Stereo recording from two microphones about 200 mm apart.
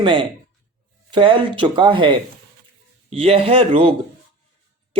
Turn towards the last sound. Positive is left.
turn(degrees=-30)  # may be behind; listen again after turning